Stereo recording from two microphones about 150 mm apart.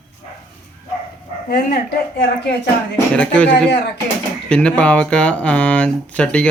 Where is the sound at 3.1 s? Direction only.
5° left (ahead or behind).